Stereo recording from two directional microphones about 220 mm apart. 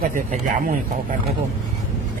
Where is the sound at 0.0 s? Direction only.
35° right (ahead or behind).